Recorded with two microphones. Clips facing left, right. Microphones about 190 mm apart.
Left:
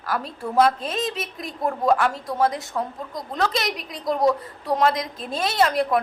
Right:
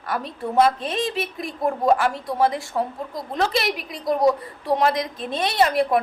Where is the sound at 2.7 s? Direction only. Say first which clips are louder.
Right 3 dB; 30° right (ahead or behind).